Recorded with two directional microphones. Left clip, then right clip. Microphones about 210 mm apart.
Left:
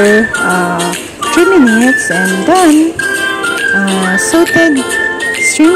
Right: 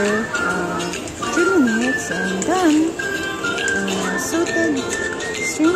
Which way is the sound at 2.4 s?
40° left (ahead or behind).